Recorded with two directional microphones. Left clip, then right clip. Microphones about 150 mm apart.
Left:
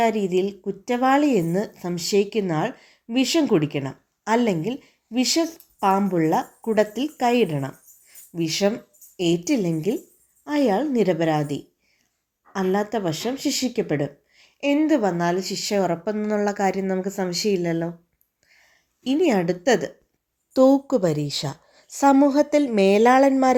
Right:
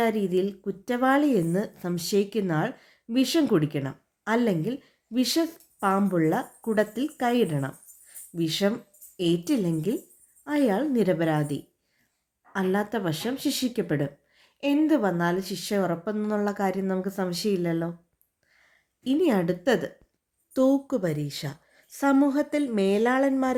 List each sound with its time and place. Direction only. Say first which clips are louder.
0.6 s speech: left 4 dB; 5° left (ahead or behind)
2.7 s a sound: left 3 dB; 50° right (ahead or behind)
3.3 s a woman's voice: left 4 dB; 5° left (ahead or behind)
20.5 s a woman's voice: left 6 dB; 20° left (ahead or behind)